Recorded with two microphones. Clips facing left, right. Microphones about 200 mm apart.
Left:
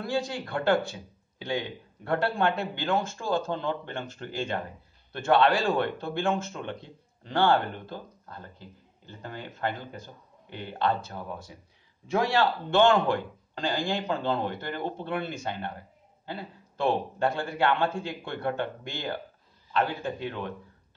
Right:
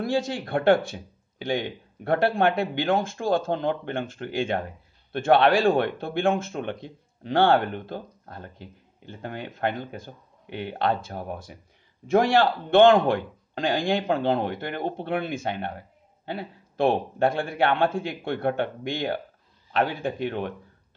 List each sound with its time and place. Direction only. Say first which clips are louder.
0.0 s speech: right 4 dB; 55° right (ahead or behind)
6.5 s speech: right 5 dB; 65° right (ahead or behind)
16.3 s a sound: right 5 dB; 65° right (ahead or behind)
17.6 s speech: right 3 dB; 60° right (ahead or behind)
19.7 s speech: right 3 dB; 60° right (ahead or behind)